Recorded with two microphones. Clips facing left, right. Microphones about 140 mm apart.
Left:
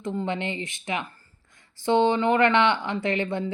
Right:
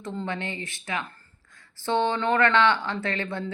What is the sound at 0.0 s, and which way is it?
Speech, 15° left (ahead or behind).